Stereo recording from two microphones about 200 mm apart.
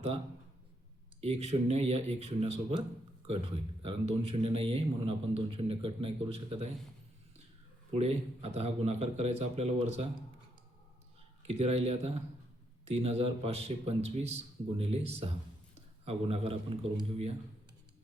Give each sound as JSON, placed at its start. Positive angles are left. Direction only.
{"t": 1.2, "sound": "a man's voice", "side_deg": -30}
{"t": 7.9, "sound": "a man's voice", "side_deg": -30}
{"t": 11.4, "sound": "a man's voice", "side_deg": -30}